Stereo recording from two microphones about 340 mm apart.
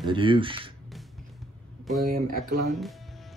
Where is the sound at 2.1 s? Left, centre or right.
Right.